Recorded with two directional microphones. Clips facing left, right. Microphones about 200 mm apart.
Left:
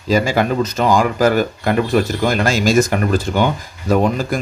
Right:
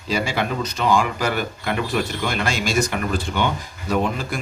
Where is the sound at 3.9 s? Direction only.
45° left (ahead or behind).